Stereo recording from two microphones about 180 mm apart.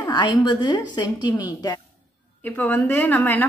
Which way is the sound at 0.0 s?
25° left (ahead or behind).